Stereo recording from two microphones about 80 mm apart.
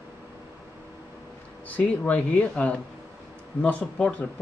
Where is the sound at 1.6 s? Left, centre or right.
Centre.